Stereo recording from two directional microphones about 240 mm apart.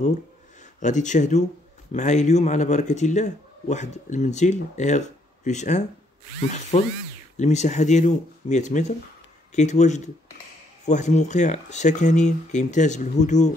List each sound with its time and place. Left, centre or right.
0.7 s a man's voice: left
7.3 s a man's voice: left